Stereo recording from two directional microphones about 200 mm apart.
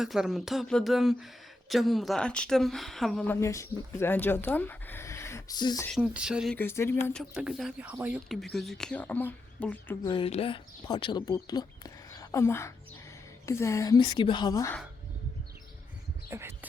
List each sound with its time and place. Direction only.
0.0 s speech: centre (ahead or behind)
3.4 s speech: 15° left (ahead or behind)
6.0 s speech: 5° right (ahead or behind)
6.6 s speech: 10° left (ahead or behind)
7.1 s speech: centre (ahead or behind)
10.0 s speech: 25° left (ahead or behind)
16.3 s speech: 15° right (ahead or behind)